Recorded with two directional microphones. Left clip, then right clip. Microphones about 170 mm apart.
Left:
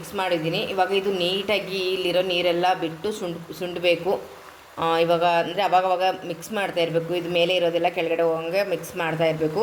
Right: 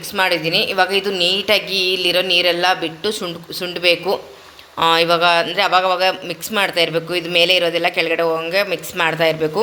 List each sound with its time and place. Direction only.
0.1 s a woman's voice: 5° right (ahead or behind)